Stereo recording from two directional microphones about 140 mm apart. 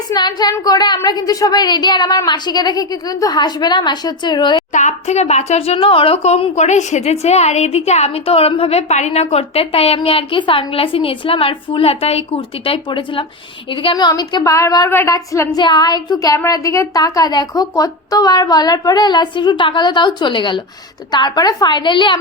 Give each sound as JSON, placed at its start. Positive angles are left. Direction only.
{"t": 0.1, "sound": "speech", "side_deg": 30}
{"t": 4.7, "sound": "a woman's voice", "side_deg": 60}